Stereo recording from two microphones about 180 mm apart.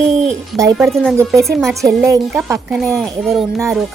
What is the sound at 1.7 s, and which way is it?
Speech, 15° right (ahead or behind).